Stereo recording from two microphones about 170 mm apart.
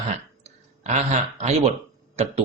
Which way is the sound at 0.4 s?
40° right (ahead or behind).